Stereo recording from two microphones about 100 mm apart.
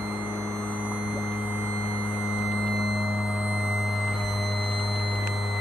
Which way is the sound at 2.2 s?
5° right (ahead or behind).